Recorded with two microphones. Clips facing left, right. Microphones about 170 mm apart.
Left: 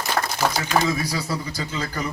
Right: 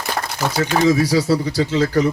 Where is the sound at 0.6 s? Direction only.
75° right (ahead or behind).